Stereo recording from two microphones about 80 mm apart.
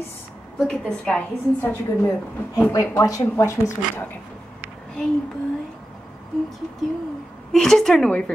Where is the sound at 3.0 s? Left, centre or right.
Left.